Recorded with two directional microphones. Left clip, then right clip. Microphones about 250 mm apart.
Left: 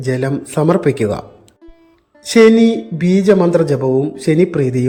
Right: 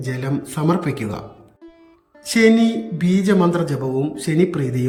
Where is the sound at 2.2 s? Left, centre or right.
Centre.